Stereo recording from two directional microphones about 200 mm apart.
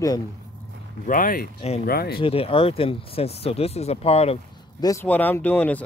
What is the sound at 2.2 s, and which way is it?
Speech, 30° left (ahead or behind).